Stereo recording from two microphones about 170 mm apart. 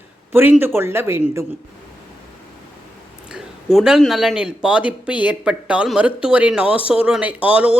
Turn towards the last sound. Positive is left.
turn(degrees=-5)  # may be behind; listen again after turning